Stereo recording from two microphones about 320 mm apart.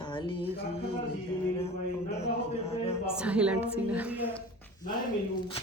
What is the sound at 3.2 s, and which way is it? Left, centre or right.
A woman's voice, centre.